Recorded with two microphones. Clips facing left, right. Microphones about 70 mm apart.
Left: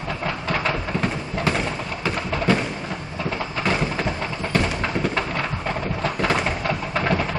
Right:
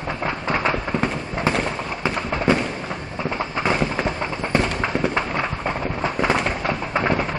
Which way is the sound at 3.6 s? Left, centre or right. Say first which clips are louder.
Right 2 dB; right.